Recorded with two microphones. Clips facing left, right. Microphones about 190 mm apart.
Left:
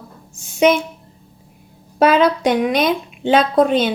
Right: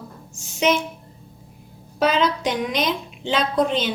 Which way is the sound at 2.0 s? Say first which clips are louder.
Left 6 dB; 55° left (ahead or behind).